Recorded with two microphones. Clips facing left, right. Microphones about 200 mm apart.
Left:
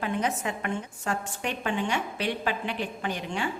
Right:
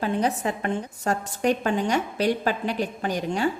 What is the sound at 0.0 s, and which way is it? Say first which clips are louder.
A woman's voice: right 4 dB; 35° right (ahead or behind).